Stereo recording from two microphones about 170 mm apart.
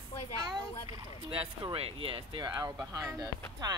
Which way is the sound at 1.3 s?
30° right (ahead or behind).